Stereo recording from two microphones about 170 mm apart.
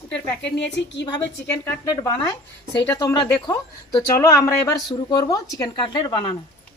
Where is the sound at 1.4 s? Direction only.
15° left (ahead or behind).